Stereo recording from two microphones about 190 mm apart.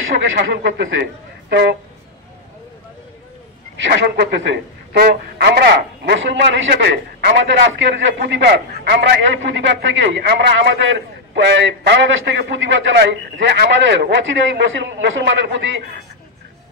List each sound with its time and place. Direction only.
0.4 s a man's voice: 70° right (ahead or behind)
3.8 s a man's voice: 60° right (ahead or behind)